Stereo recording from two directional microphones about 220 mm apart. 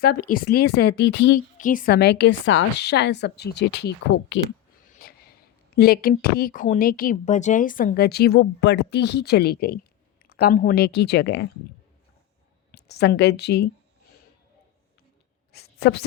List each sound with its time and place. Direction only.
0.2 s speech: 40° left (ahead or behind)
1.5 s speech: 40° left (ahead or behind)
4.9 s a sound: 40° left (ahead or behind)
5.7 s speech: 45° left (ahead or behind)
12.7 s a woman's voice: 50° left (ahead or behind)
15.5 s a sound: 45° left (ahead or behind)